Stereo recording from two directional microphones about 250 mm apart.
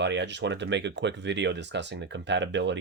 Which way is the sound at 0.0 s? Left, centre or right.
Right.